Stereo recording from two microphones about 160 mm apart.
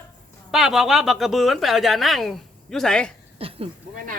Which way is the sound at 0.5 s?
Centre (ahead or behind).